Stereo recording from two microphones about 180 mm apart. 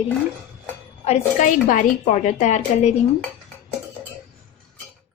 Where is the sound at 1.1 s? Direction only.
45° left (ahead or behind).